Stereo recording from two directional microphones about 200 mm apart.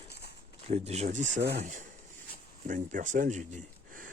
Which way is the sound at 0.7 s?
30° right (ahead or behind).